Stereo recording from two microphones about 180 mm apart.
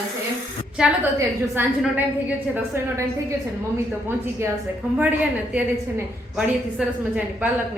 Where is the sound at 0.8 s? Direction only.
5° right (ahead or behind).